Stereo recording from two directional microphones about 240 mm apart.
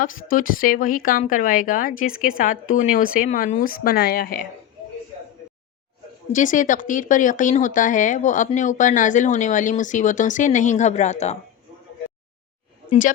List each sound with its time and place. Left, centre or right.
0.0 s speech: left
6.3 s speech: left